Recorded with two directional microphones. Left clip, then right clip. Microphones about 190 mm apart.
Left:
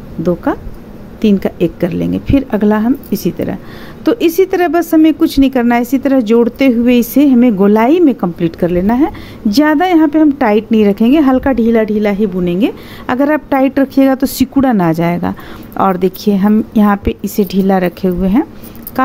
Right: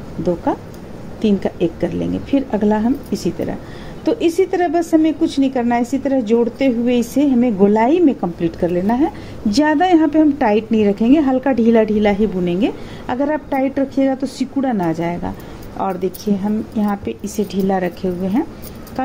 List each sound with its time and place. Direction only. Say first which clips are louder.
0.5 s speech: left 3 dB; 30° left (ahead or behind)